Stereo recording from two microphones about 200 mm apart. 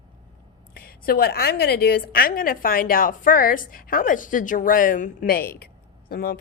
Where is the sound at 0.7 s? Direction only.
50° left (ahead or behind).